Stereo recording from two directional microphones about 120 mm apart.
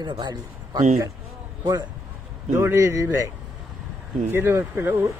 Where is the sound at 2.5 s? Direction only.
25° right (ahead or behind).